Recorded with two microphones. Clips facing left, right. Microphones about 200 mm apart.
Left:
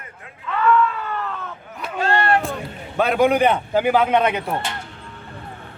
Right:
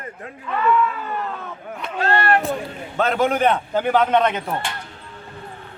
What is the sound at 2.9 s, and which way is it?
A man's voice, 10° left (ahead or behind).